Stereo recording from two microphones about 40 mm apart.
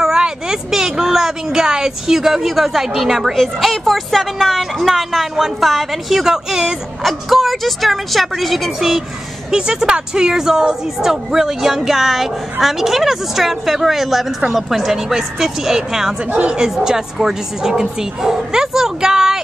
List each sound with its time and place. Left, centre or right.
0.2 s a woman's voice: centre
3.3 s a woman's voice: centre
9.5 s speech: centre
16.3 s a woman's voice: right
16.7 s speech: centre